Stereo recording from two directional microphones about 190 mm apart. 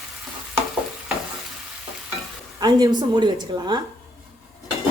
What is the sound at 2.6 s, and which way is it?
A woman's voice, 20° right (ahead or behind).